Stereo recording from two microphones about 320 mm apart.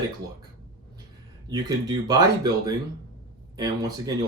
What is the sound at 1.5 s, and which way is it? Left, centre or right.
Speech, centre.